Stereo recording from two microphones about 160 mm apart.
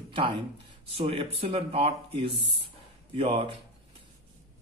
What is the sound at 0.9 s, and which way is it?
Speech, 35° right (ahead or behind).